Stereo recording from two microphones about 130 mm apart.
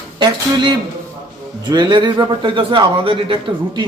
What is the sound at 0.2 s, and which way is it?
Speech, 35° right (ahead or behind).